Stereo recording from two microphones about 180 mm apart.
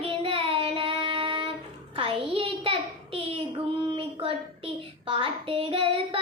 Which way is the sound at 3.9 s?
30° right (ahead or behind).